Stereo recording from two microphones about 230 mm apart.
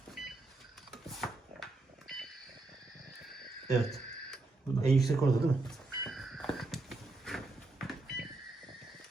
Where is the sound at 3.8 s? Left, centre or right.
Centre.